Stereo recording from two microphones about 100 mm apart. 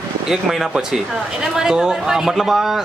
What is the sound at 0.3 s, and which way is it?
A man's voice, centre (ahead or behind).